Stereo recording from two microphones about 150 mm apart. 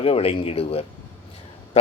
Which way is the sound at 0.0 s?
40° left (ahead or behind).